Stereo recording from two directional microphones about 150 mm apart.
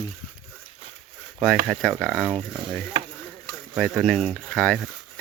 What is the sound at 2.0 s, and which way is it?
Speech, 5° left (ahead or behind).